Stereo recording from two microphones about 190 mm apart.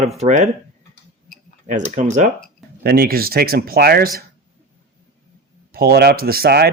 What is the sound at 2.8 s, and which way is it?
Speech, 55° right (ahead or behind).